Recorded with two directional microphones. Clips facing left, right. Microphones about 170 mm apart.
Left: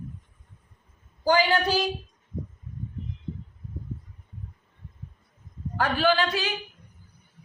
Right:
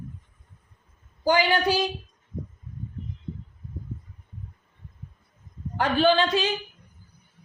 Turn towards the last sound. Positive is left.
turn(degrees=-20)  # may be behind; listen again after turning